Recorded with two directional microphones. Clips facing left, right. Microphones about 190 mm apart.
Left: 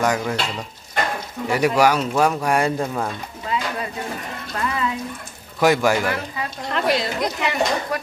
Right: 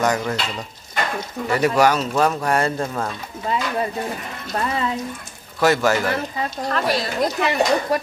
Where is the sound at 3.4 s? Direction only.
35° right (ahead or behind).